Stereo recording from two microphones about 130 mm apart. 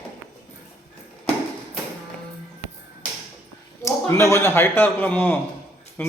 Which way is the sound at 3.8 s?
20° left (ahead or behind).